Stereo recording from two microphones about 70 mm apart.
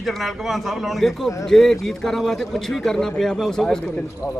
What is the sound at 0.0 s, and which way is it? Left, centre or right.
A man's voice, centre.